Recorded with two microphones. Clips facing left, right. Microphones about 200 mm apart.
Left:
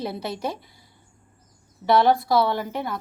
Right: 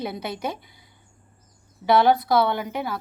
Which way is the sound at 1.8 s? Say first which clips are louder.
Even; centre (ahead or behind).